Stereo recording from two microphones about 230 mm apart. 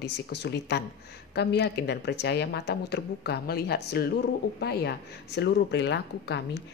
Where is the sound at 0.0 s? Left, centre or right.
Left.